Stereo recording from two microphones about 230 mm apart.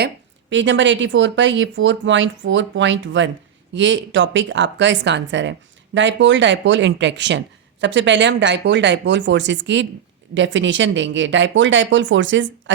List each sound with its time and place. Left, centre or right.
0.5 s speech: right